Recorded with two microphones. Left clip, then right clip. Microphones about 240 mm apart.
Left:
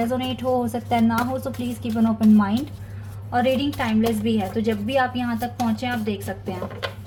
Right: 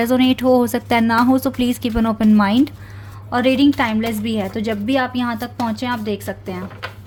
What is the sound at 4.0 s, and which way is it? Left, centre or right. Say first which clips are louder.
Speech: right 1 dB; right.